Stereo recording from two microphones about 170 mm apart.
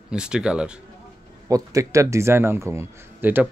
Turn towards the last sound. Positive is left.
turn(degrees=-10)  # may be behind; listen again after turning